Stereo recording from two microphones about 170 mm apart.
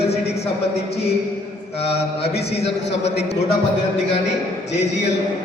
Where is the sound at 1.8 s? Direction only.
35° left (ahead or behind).